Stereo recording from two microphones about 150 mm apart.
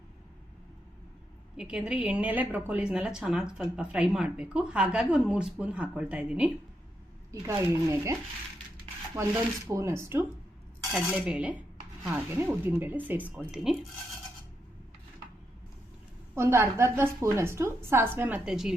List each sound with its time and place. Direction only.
1.5 s a woman's voice: 5° right (ahead or behind)
7.3 s speech: 20° right (ahead or behind)
9.6 s a woman's voice: 20° right (ahead or behind)
16.3 s a woman's voice: 15° right (ahead or behind)